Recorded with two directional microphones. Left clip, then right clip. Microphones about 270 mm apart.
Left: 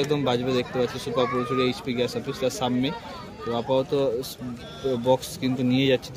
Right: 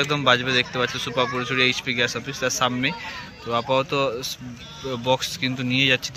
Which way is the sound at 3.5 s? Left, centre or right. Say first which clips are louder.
Right 2 dB; right.